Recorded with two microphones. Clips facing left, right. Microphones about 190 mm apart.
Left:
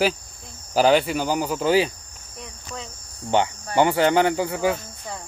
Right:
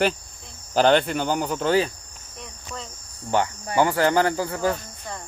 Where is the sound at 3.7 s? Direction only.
20° left (ahead or behind).